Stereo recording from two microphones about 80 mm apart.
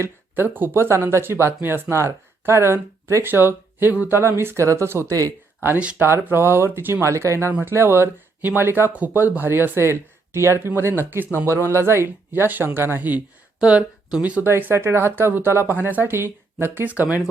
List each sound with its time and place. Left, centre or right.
0.0 s speech: right
5.6 s speech: centre
6.2 s speech: right
7.0 s speech: right
13.6 s speech: centre
14.5 s speech: right